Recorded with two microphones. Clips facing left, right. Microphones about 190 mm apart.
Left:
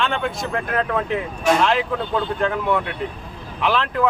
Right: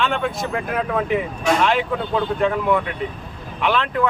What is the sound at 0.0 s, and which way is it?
Speech, centre (ahead or behind).